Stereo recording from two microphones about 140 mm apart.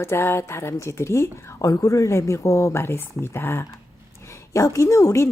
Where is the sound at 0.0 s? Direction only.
15° left (ahead or behind).